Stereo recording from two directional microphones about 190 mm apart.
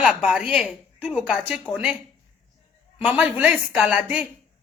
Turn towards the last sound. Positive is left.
turn(degrees=-5)  # may be behind; listen again after turning